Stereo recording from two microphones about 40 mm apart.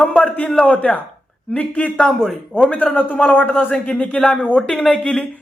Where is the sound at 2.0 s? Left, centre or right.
Centre.